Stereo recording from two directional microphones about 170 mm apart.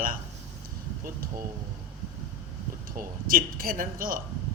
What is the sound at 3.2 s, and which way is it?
Speech, 55° right (ahead or behind).